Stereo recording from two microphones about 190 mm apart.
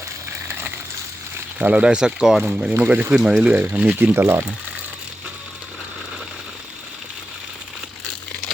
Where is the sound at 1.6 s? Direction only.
10° right (ahead or behind).